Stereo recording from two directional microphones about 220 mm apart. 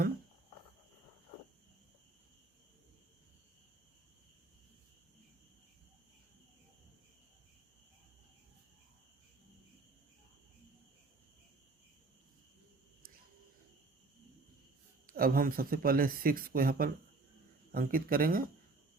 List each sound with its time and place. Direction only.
15.0 s speech: 40° right (ahead or behind)